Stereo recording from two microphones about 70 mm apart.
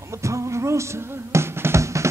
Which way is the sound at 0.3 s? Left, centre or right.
Right.